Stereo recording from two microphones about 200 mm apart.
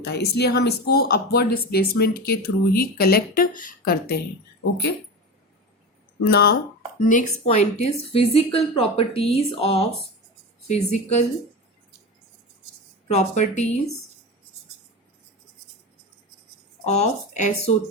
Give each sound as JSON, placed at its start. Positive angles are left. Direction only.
{"t": 0.0, "sound": "speech", "side_deg": 55}
{"t": 6.2, "sound": "speech", "side_deg": 50}
{"t": 7.0, "sound": "a woman's voice", "side_deg": 40}
{"t": 13.1, "sound": "a woman's voice", "side_deg": 35}
{"t": 16.8, "sound": "speech", "side_deg": 35}